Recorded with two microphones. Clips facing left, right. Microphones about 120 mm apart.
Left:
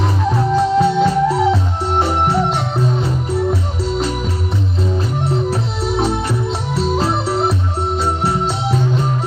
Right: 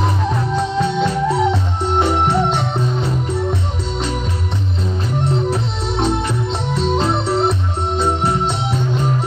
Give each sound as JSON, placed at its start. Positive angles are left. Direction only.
{"t": 0.6, "sound": "music", "side_deg": 5}
{"t": 5.5, "sound": "music", "side_deg": 5}